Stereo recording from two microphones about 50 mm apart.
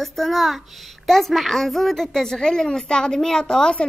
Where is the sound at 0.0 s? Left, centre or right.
Centre.